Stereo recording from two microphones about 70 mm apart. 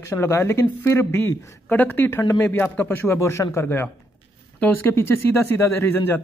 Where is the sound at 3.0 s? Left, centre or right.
Left.